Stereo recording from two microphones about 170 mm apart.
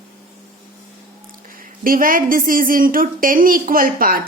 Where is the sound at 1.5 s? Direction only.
55° right (ahead or behind).